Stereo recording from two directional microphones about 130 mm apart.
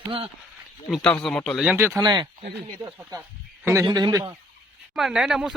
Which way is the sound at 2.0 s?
30° right (ahead or behind).